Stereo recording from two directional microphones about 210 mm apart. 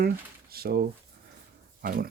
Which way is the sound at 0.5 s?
45° right (ahead or behind).